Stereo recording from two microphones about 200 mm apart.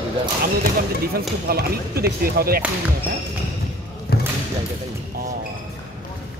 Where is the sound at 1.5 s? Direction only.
50° right (ahead or behind).